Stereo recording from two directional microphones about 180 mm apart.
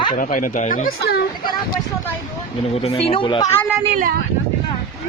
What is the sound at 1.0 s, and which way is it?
Speech, 65° left (ahead or behind).